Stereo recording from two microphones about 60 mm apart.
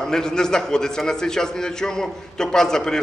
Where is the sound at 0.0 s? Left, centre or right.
Centre.